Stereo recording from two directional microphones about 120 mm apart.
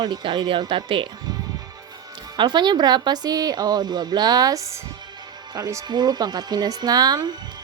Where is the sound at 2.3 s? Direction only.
40° right (ahead or behind).